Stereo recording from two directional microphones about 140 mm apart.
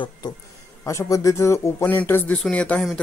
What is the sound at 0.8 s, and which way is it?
Speech, 20° left (ahead or behind).